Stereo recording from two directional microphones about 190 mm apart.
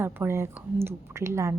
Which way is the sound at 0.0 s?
10° right (ahead or behind).